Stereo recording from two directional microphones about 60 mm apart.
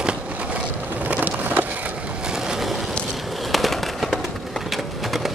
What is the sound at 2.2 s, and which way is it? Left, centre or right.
Vehicle, centre.